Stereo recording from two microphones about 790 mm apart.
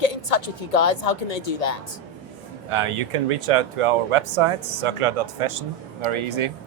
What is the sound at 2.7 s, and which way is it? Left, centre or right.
Speech, right.